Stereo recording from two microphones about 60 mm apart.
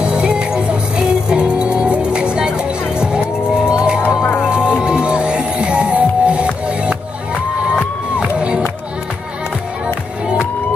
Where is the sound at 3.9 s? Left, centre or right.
Left.